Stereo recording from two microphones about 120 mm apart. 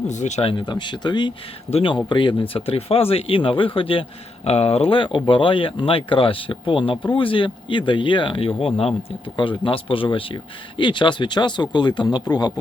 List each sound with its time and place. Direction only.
0.1 s speech: 75° left (ahead or behind)
0.4 s speech: 40° left (ahead or behind)
2.5 s speech: 50° left (ahead or behind)
4.4 s speech: 60° left (ahead or behind); by 12.5 s 35° left (ahead or behind)